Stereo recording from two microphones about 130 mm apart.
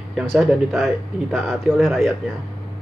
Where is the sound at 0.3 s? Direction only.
Centre (ahead or behind).